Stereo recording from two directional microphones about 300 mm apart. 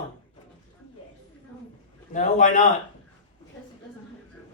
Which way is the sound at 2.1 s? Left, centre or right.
Left.